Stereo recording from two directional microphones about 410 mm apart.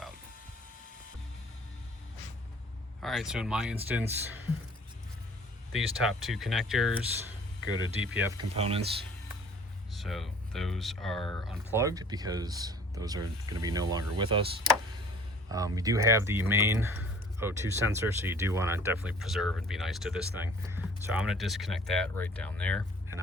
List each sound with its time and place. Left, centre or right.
3.0 s speech: centre
6.0 s speech: centre
7.6 s speech: right
8.5 s speech: centre
9.9 s speech: centre
15.4 s speech: centre